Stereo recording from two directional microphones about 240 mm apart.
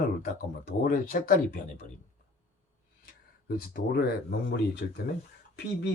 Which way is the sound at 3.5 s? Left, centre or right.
Left.